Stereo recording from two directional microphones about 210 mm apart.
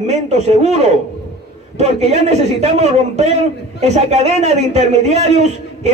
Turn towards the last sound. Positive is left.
turn(degrees=-30)  # may be behind; listen again after turning